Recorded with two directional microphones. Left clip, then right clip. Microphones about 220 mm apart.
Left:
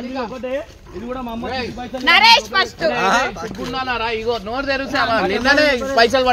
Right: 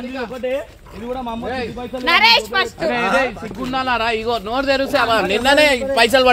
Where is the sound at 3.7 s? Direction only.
50° right (ahead or behind); by 5.6 s 25° right (ahead or behind).